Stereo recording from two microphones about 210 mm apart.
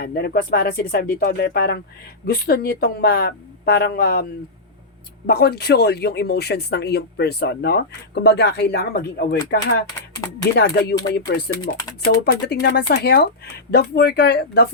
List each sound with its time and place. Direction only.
0.0 s speech: 50° left (ahead or behind)
10.6 s speech: 50° left (ahead or behind)